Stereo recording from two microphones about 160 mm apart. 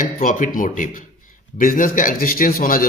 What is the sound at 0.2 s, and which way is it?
A man's voice, 55° left (ahead or behind).